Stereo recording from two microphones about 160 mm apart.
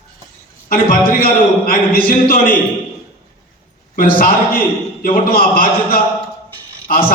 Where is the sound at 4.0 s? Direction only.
60° left (ahead or behind).